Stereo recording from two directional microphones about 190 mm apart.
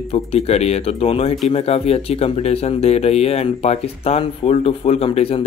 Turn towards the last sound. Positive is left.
turn(degrees=30)  # may be behind; listen again after turning